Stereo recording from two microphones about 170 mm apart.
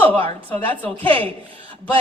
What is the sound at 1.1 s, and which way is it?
Speech, 30° right (ahead or behind).